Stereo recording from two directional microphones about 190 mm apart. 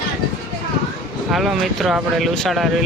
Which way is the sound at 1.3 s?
Centre (ahead or behind).